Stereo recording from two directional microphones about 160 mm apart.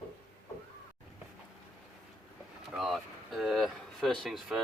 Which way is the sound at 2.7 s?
Centre (ahead or behind).